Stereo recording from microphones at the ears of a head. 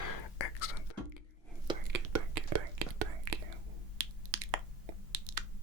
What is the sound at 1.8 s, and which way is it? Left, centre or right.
Whispering, right.